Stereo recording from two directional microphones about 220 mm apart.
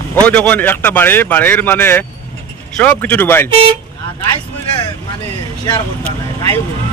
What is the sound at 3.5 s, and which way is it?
Speech, 25° right (ahead or behind).